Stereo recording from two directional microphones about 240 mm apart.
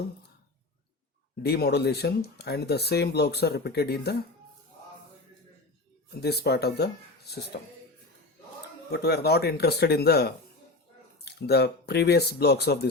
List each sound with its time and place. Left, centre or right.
1.4 s speech: left
6.1 s speech: left
8.9 s speech: left